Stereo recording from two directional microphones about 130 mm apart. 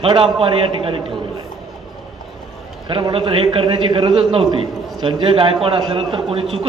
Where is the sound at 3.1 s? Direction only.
45° right (ahead or behind).